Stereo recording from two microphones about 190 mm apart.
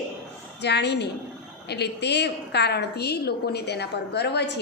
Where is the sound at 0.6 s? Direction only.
65° left (ahead or behind).